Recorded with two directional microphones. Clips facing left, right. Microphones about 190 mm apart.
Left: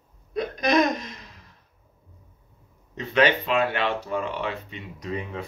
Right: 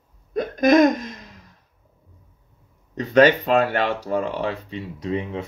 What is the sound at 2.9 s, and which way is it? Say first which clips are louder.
Speech: right 6 dB; 40° right (ahead or behind).